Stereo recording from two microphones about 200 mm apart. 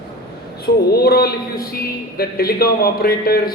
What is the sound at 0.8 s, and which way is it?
A man's voice, 50° left (ahead or behind).